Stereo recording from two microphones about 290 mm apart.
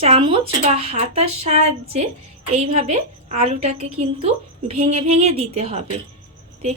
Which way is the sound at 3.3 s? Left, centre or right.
Right.